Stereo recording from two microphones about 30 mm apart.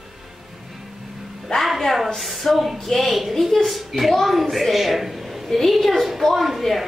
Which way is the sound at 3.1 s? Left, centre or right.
Centre.